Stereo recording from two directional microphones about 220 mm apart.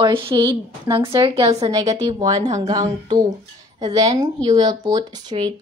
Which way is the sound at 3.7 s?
20° right (ahead or behind).